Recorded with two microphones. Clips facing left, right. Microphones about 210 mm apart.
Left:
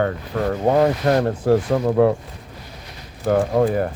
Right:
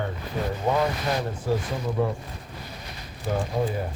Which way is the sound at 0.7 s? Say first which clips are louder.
Left 8 dB; 50° left (ahead or behind).